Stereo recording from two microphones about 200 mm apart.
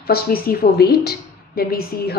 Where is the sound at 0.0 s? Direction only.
50° left (ahead or behind).